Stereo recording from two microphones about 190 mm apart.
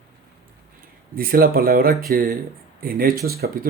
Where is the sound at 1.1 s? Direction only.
50° right (ahead or behind).